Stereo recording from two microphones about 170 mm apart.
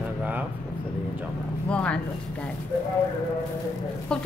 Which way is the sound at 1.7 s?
5° left (ahead or behind).